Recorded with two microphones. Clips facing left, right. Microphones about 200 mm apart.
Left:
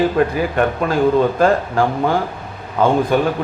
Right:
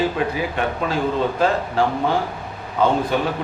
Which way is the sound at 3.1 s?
50° left (ahead or behind).